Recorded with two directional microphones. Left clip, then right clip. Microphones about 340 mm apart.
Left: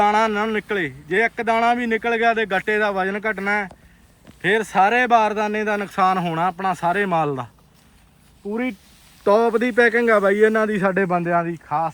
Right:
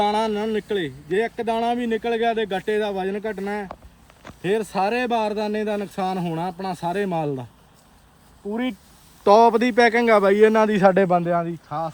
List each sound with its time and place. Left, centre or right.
0.0 s speech: centre
8.4 s a man's voice: centre